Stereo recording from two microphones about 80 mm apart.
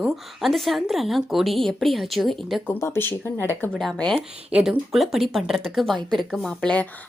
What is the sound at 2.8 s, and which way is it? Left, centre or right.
Speech, left.